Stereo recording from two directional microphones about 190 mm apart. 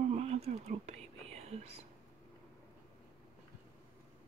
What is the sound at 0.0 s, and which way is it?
Whispering, 35° right (ahead or behind).